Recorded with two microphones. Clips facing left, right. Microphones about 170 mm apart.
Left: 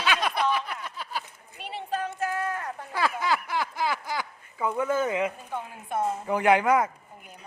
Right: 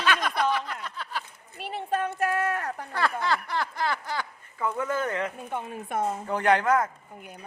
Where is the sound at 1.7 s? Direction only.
55° right (ahead or behind).